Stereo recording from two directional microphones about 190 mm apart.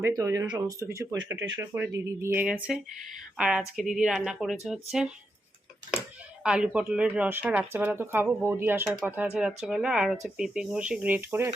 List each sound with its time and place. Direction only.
0.0 s speech: 15° right (ahead or behind)
6.4 s speech: 5° right (ahead or behind)